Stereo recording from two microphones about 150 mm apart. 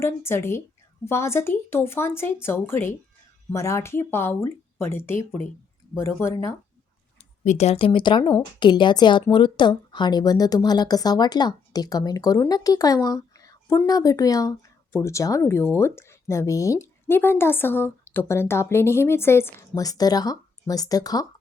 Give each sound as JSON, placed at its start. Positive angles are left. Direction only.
{"t": 0.0, "sound": "speech", "side_deg": 15}
{"t": 7.4, "sound": "speech", "side_deg": 50}